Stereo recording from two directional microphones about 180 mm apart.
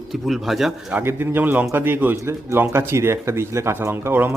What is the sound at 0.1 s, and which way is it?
Speech, centre (ahead or behind).